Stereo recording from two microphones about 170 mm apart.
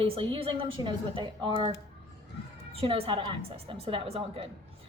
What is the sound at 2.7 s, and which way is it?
A woman's voice, 35° right (ahead or behind).